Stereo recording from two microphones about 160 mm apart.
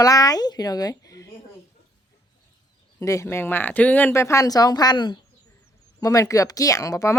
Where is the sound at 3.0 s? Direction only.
15° left (ahead or behind).